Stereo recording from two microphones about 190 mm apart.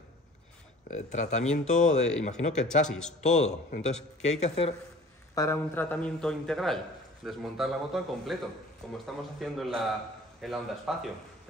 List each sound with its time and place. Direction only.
0.8 s a man's voice: 40° left (ahead or behind)
2.9 s a man's voice: 5° left (ahead or behind)
3.2 s a man's voice: 35° left (ahead or behind)
5.3 s a man's voice: 15° left (ahead or behind); by 11.1 s centre (ahead or behind)